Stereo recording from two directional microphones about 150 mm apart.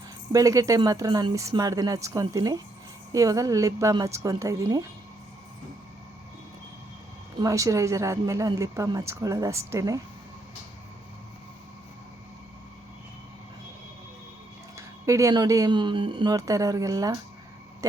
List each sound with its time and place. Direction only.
0.3 s speech: 20° right (ahead or behind)
7.3 s speech: 20° right (ahead or behind)
14.8 s speech: 20° right (ahead or behind)
16.3 s speech: 20° right (ahead or behind)